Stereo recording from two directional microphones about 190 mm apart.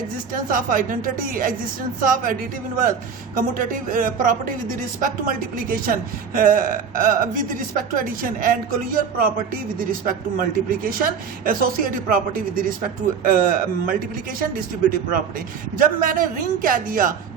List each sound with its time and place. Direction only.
0.3 s a woman's voice: 45° right (ahead or behind)